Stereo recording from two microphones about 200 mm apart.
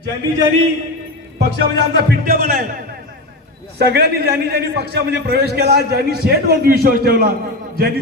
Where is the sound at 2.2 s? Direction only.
45° right (ahead or behind).